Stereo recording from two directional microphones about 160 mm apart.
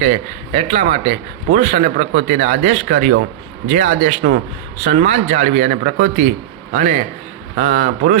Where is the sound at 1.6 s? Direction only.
40° right (ahead or behind).